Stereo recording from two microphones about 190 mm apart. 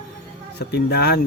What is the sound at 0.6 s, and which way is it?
Speech, 60° left (ahead or behind).